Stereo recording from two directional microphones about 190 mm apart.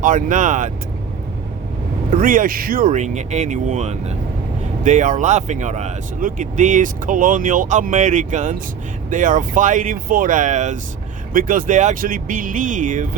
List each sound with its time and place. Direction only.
0.0 s speech: 45° right (ahead or behind)
2.1 s speech: 45° right (ahead or behind)